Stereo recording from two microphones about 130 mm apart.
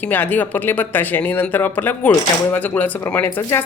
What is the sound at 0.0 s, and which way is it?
Speech, 15° left (ahead or behind).